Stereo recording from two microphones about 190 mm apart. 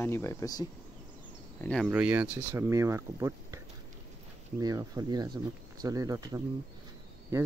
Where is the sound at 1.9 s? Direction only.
10° right (ahead or behind).